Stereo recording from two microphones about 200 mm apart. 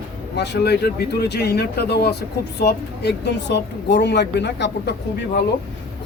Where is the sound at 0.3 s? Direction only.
55° left (ahead or behind).